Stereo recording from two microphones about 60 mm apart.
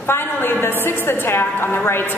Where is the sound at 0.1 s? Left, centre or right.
Left.